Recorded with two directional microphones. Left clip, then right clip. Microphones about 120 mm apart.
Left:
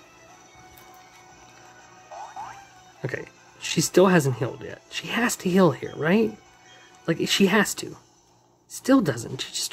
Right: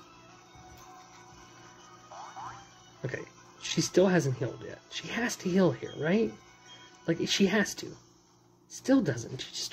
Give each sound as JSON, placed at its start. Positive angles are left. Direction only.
{"t": 3.0, "sound": "speech", "side_deg": 40}